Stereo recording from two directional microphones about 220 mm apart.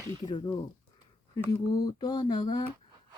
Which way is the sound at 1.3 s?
15° left (ahead or behind).